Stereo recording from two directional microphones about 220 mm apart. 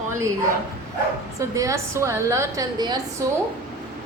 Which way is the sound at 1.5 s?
15° right (ahead or behind).